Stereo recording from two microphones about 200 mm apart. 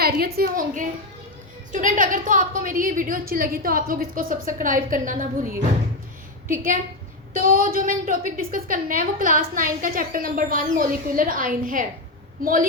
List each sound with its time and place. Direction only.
0.3 s a woman's voice: 45° right (ahead or behind)